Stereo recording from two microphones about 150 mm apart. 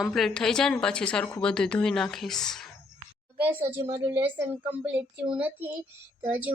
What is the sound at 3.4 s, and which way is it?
A child's voice, 15° right (ahead or behind).